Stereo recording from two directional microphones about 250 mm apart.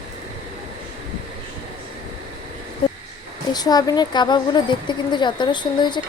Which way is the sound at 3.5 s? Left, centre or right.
Centre.